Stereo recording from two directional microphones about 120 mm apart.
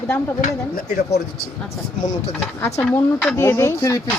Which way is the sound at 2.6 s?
25° left (ahead or behind).